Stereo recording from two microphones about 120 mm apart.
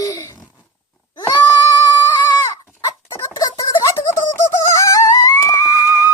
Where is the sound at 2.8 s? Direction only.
25° left (ahead or behind).